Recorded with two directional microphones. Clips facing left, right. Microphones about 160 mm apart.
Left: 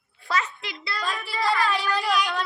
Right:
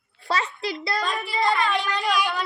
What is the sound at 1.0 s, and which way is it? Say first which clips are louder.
A child's voice: right 1 dB; centre (ahead or behind).